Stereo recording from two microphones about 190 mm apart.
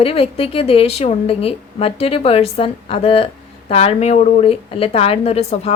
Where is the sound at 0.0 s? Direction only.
30° left (ahead or behind).